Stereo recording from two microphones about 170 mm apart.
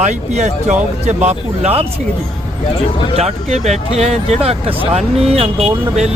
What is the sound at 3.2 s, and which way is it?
Speech, 40° right (ahead or behind).